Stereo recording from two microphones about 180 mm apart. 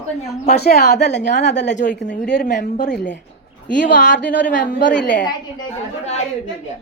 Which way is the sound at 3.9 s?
45° left (ahead or behind).